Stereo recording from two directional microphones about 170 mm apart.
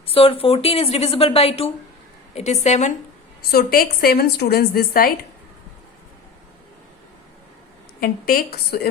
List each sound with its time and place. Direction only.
0.0 s a woman's voice: 35° left (ahead or behind)
3.5 s a woman's voice: 60° left (ahead or behind)
8.0 s a woman's voice: 60° left (ahead or behind)